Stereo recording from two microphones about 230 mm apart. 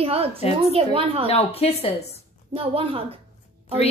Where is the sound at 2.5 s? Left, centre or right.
Right.